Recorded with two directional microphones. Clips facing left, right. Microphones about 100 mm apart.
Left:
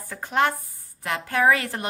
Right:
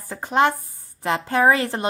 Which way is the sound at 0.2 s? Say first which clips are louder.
Right 4 dB; 20° right (ahead or behind).